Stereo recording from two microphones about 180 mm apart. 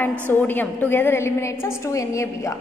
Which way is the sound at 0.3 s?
10° left (ahead or behind).